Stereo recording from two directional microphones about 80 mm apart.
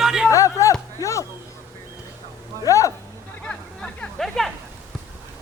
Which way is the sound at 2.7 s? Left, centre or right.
Left.